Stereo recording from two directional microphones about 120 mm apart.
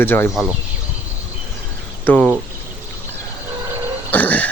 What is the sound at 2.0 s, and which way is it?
Speech, 15° left (ahead or behind).